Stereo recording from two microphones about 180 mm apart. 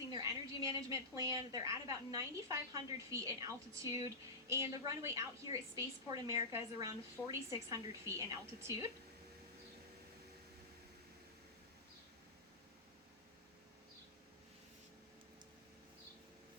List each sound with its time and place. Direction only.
0.1 s a woman's voice: 20° right (ahead or behind)